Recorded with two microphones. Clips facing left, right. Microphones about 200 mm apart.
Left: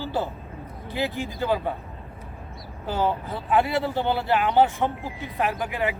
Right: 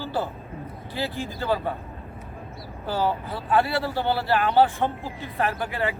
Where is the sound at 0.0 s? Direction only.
15° left (ahead or behind).